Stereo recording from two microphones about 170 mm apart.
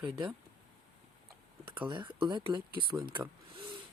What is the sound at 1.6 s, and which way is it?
Speech, 30° right (ahead or behind).